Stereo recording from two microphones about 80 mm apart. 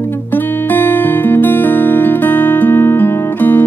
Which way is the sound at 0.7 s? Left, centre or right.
Left.